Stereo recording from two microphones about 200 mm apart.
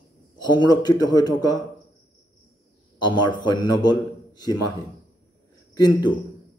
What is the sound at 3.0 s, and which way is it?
A man's voice, 25° left (ahead or behind).